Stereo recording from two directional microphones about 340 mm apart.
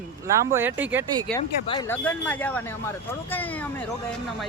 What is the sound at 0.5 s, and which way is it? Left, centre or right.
Speech, centre.